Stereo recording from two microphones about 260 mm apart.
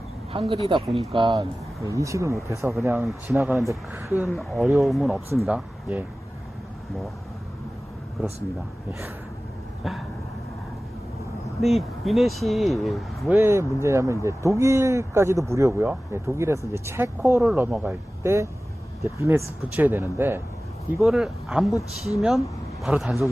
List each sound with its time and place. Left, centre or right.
0.3 s speech: right
8.9 s speech: centre
11.6 s speech: centre